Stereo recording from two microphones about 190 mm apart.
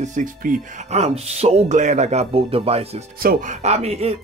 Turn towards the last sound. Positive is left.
turn(degrees=-35)  # may be behind; listen again after turning